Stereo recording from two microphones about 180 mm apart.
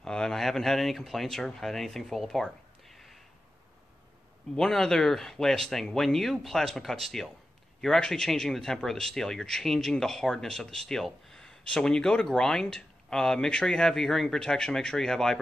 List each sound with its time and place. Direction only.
0.0 s speech: 5° left (ahead or behind)
4.6 s speech: centre (ahead or behind)